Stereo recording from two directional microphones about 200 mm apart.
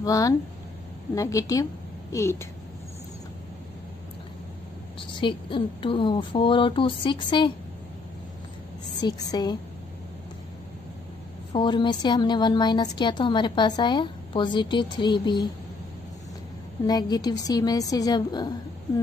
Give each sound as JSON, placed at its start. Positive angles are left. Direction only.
{"t": 0.0, "sound": "a woman's voice", "side_deg": 15}
{"t": 5.0, "sound": "a woman's voice", "side_deg": 25}
{"t": 9.0, "sound": "a woman's voice", "side_deg": 20}
{"t": 11.5, "sound": "a woman's voice", "side_deg": 25}
{"t": 16.8, "sound": "a woman's voice", "side_deg": 20}